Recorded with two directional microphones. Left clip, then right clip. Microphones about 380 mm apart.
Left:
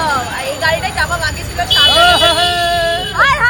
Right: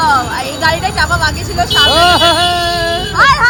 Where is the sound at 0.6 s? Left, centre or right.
Centre.